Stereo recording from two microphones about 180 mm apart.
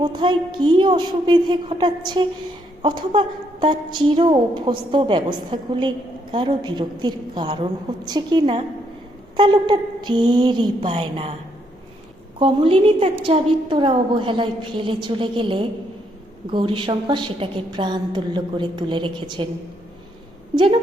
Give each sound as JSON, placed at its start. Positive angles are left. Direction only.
{"t": 0.0, "sound": "a woman's voice", "side_deg": -25}
{"t": 12.4, "sound": "a woman's voice", "side_deg": -30}